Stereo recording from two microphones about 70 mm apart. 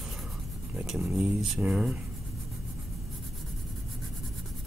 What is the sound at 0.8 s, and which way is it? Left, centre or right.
Speech, centre.